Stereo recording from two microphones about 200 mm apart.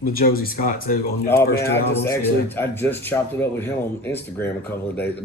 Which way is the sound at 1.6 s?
10° left (ahead or behind).